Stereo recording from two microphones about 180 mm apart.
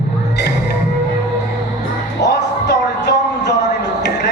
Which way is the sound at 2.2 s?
70° left (ahead or behind).